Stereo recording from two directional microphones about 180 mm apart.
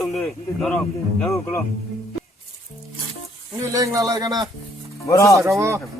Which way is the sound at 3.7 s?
20° right (ahead or behind).